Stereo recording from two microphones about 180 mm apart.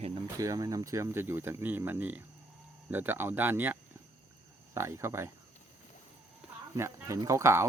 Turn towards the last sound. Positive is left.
turn(degrees=-15)  # may be behind; listen again after turning